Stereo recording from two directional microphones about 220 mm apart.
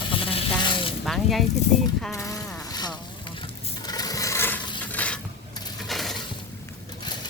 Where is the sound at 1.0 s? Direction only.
Centre (ahead or behind).